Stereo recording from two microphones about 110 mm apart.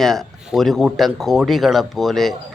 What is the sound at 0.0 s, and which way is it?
Speech, centre (ahead or behind).